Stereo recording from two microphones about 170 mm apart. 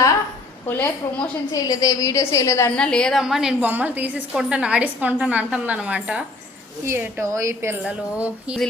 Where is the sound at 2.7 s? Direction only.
5° left (ahead or behind).